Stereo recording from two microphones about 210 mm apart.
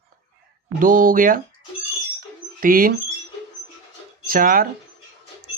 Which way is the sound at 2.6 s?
40° right (ahead or behind).